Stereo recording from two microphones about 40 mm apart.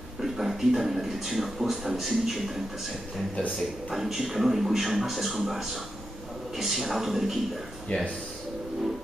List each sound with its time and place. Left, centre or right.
0.2 s a man's voice: centre
3.9 s a man's voice: centre
7.9 s speech: left